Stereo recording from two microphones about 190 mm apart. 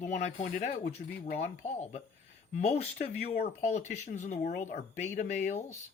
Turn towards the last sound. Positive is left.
turn(degrees=40)  # may be behind; listen again after turning